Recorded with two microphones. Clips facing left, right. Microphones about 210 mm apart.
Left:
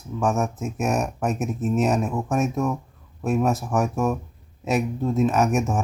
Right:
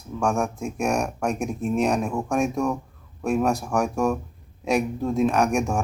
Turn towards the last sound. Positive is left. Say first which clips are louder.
# even
turn(degrees=5)  # may be behind; listen again after turning